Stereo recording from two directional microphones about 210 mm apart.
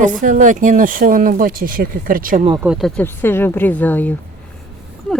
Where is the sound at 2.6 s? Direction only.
5° right (ahead or behind).